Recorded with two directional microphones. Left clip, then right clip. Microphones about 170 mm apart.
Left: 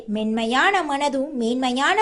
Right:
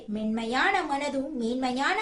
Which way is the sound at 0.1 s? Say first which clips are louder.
Left 7 dB; 45° left (ahead or behind).